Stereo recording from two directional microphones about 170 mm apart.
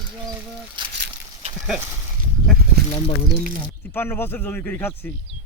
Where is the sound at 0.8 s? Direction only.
25° right (ahead or behind).